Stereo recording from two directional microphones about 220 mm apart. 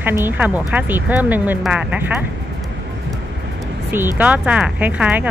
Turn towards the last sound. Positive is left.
turn(degrees=-5)  # may be behind; listen again after turning